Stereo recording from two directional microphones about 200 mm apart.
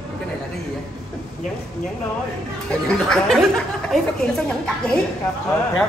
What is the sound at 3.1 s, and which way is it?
Speech, centre (ahead or behind).